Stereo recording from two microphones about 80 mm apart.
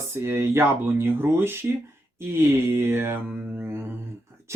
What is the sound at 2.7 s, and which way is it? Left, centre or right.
Music, right.